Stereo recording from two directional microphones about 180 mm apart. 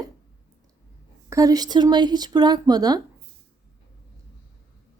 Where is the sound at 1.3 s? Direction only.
20° right (ahead or behind).